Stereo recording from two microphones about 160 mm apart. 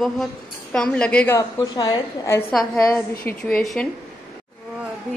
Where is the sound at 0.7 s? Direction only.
5° left (ahead or behind).